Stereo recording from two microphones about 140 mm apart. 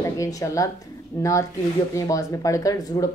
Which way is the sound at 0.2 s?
25° left (ahead or behind).